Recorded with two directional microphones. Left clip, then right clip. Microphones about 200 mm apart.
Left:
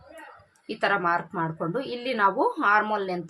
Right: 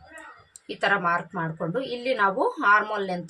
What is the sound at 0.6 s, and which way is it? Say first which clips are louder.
A woman's voice: right 1 dB; 15° left (ahead or behind).